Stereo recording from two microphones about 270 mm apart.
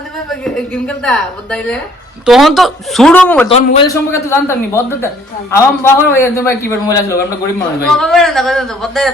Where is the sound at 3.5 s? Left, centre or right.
Left.